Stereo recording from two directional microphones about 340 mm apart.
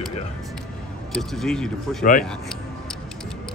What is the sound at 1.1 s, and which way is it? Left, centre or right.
Speech, centre.